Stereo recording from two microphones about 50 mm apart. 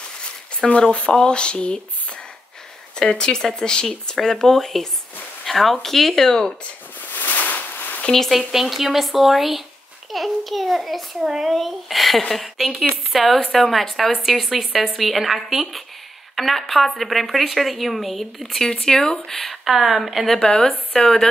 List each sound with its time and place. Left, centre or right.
0.2 s speech: left
3.0 s speech: centre
7.1 s a sound: left
8.1 s speech: centre
8.4 s speech: centre
18.7 s speech: centre
19.6 s speech: centre
20.3 s speech: centre